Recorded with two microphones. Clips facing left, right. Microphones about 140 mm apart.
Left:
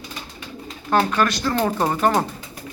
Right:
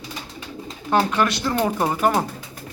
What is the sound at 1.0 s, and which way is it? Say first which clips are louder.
Speech: even; 20° right (ahead or behind).